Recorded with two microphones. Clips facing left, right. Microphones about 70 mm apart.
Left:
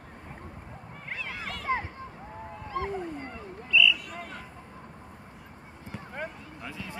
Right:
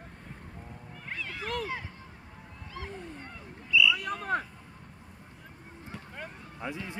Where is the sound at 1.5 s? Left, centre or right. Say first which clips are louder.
Left 5 dB; left.